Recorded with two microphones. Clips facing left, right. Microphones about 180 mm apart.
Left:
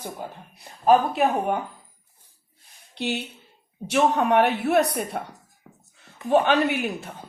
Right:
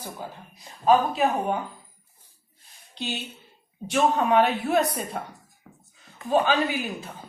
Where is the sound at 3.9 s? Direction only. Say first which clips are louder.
Left 1 dB; 65° left (ahead or behind).